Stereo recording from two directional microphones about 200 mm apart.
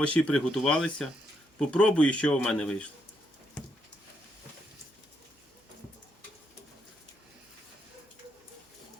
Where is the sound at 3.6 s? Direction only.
5° left (ahead or behind).